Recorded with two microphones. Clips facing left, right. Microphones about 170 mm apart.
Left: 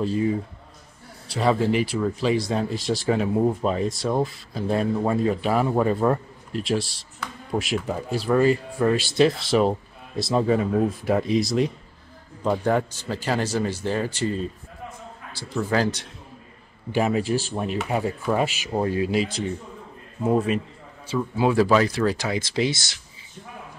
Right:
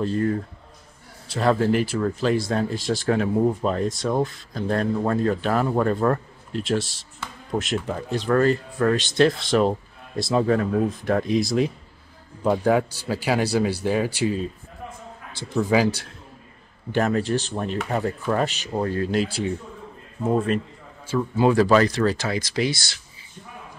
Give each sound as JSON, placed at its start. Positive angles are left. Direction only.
{"t": 0.0, "sound": "speech", "side_deg": 5}
{"t": 15.3, "sound": "speech", "side_deg": -15}
{"t": 16.9, "sound": "speech", "side_deg": 5}
{"t": 19.2, "sound": "speech", "side_deg": -5}
{"t": 20.2, "sound": "speech", "side_deg": 5}